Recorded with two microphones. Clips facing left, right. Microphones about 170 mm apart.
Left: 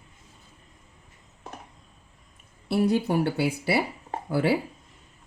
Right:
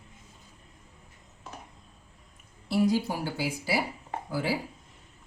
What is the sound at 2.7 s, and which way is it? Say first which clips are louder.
Speech: left 3 dB; 65° left (ahead or behind).